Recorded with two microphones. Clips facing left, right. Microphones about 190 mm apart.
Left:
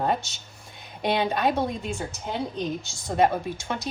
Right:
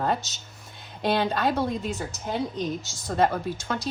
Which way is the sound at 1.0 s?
15° left (ahead or behind).